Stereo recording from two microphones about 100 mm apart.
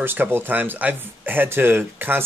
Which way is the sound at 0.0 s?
20° right (ahead or behind).